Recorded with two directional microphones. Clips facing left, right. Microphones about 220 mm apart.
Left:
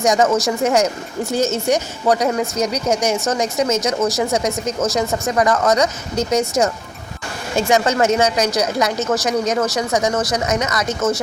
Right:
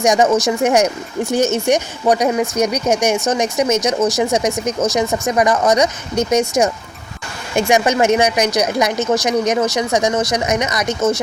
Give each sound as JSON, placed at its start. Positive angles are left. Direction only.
{"t": 0.0, "sound": "a woman's voice", "side_deg": -15}
{"t": 7.5, "sound": "a woman's voice", "side_deg": -15}